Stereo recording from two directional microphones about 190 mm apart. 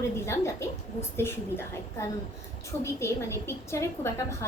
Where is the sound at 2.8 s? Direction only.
15° left (ahead or behind).